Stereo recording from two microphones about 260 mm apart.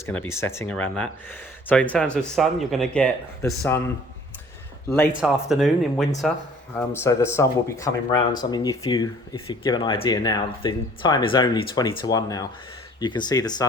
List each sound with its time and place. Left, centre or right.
0.0 s speech: centre
7.0 s speech: centre